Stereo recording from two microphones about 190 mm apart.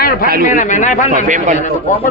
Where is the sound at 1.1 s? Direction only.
40° right (ahead or behind).